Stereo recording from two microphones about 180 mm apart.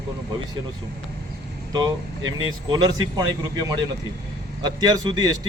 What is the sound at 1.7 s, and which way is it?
Speech, 20° right (ahead or behind).